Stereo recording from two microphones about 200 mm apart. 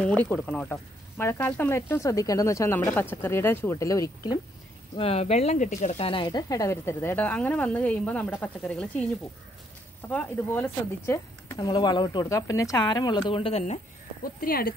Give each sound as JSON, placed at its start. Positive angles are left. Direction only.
{"t": 0.0, "sound": "speech", "side_deg": 5}
{"t": 4.9, "sound": "speech", "side_deg": 30}
{"t": 10.0, "sound": "speech", "side_deg": 10}
{"t": 11.5, "sound": "speech", "side_deg": 20}
{"t": 14.2, "sound": "speech", "side_deg": 45}